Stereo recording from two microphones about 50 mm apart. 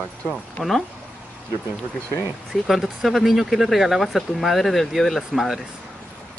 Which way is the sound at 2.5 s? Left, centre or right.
Centre.